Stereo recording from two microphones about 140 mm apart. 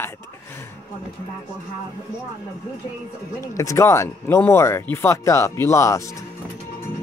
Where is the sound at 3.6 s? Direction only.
20° left (ahead or behind).